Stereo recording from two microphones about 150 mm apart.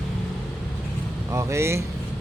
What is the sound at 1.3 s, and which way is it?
Speech, 20° right (ahead or behind).